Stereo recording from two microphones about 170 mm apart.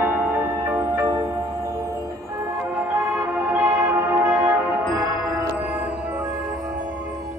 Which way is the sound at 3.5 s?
15° right (ahead or behind).